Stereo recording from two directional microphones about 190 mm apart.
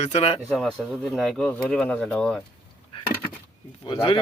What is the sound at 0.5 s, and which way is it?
Speech, centre (ahead or behind).